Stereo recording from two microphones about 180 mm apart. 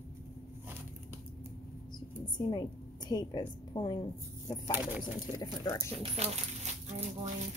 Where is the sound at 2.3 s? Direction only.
25° left (ahead or behind).